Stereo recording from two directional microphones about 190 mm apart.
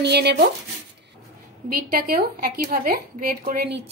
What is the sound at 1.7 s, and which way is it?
Speech, 55° right (ahead or behind).